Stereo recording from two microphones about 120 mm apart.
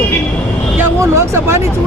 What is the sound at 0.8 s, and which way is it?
Speech, 25° right (ahead or behind).